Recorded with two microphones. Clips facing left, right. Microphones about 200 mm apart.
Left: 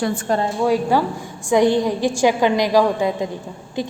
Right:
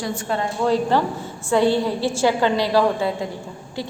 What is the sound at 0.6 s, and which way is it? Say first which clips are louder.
A woman's voice: even; 10° left (ahead or behind).